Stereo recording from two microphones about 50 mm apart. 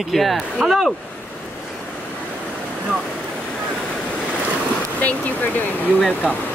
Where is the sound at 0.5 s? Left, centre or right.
Centre.